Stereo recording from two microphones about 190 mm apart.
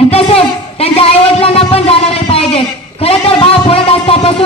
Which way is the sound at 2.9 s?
30° left (ahead or behind).